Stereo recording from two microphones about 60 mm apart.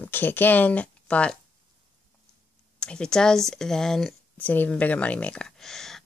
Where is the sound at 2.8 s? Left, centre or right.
Centre.